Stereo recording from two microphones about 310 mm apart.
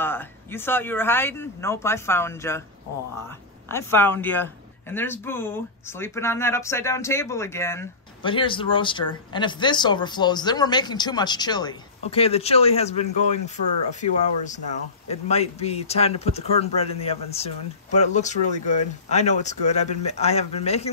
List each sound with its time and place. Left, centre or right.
0.0 s a man's voice: centre
3.6 s a man's voice: centre
14.0 s speech: left
15.0 s speech: centre